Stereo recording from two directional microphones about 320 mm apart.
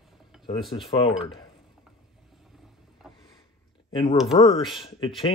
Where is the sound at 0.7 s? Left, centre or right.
Centre.